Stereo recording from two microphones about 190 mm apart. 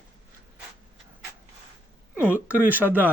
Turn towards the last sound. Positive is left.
turn(degrees=-10)  # may be behind; listen again after turning